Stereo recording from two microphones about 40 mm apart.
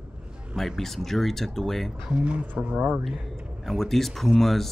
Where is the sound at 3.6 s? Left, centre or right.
Centre.